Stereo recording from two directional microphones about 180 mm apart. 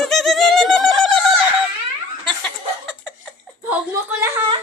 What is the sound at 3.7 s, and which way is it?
Whimper, 10° right (ahead or behind).